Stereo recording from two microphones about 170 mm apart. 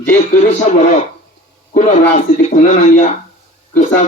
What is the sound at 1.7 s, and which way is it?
A man's voice, 45° left (ahead or behind).